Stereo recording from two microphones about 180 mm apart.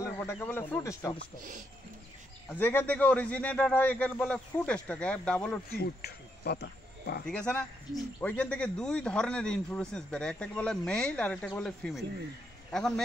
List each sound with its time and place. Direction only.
0.0 s a man's voice: 10° left (ahead or behind)
2.5 s a man's voice: 10° left (ahead or behind)
5.8 s speech: 60° left (ahead or behind)
7.2 s speech: 5° left (ahead or behind)